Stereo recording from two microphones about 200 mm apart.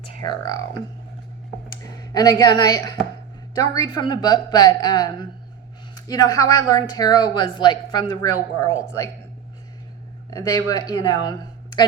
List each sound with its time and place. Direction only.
0.0 s speech: 20° left (ahead or behind)
1.7 s a woman's voice: 20° left (ahead or behind)
10.2 s speech: 15° left (ahead or behind)